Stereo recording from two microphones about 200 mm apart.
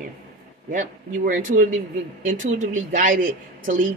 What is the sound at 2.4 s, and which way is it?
Speech, 40° right (ahead or behind).